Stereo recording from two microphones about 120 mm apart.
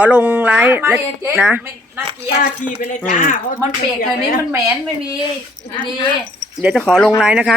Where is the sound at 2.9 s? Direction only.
90° left.